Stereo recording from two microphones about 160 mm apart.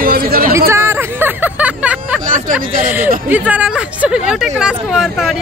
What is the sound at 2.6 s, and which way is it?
Speech, 60° right (ahead or behind).